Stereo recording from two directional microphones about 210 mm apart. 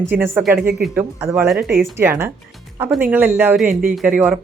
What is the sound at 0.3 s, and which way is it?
Speech, 5° right (ahead or behind).